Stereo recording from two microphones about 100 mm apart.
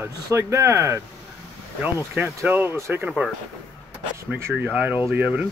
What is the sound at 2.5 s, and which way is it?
Speech, 20° right (ahead or behind).